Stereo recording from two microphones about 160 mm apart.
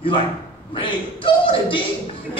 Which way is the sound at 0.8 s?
30° left (ahead or behind).